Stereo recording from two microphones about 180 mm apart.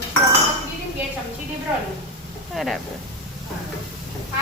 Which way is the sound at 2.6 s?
Centre (ahead or behind).